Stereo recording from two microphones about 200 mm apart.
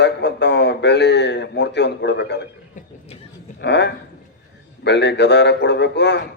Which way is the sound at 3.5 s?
60° left (ahead or behind).